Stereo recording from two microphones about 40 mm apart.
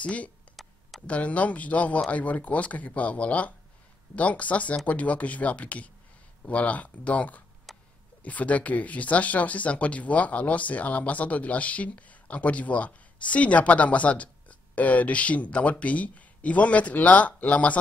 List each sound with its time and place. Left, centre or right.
0.0 s speech: left
7.7 s a sound: centre
8.2 s speech: left